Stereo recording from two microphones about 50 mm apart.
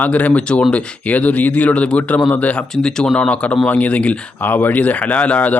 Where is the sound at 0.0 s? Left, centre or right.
Left.